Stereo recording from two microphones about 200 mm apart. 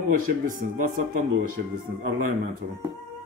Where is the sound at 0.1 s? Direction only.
45° right (ahead or behind).